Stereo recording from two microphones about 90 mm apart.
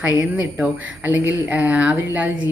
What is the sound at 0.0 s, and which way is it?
A woman's voice, 15° right (ahead or behind).